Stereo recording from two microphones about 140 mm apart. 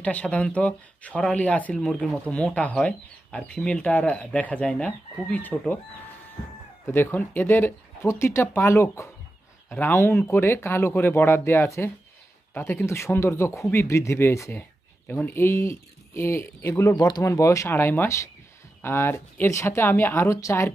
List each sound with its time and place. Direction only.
0.0 s speech: 10° left (ahead or behind)
6.9 s speech: 15° left (ahead or behind)